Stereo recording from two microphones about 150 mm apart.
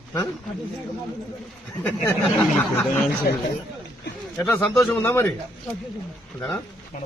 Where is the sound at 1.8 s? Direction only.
10° left (ahead or behind).